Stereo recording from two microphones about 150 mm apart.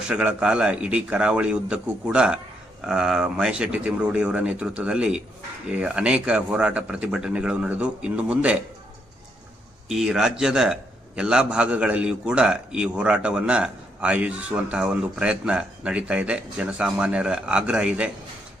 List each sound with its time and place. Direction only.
0.1 s a man's voice: 10° right (ahead or behind)
9.9 s a man's voice: 5° right (ahead or behind)